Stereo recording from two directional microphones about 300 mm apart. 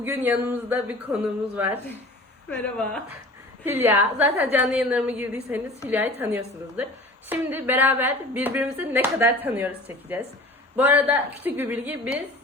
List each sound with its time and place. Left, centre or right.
0.0 s a woman's voice: centre